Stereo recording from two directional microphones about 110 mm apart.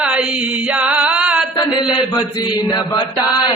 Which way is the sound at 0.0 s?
10° right (ahead or behind).